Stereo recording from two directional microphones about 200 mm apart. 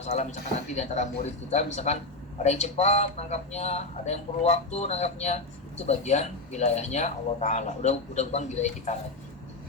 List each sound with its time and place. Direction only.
0.0 s speech: 35° left (ahead or behind)